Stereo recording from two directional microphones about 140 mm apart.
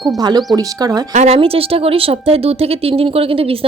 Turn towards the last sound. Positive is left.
turn(degrees=-40)  # may be behind; listen again after turning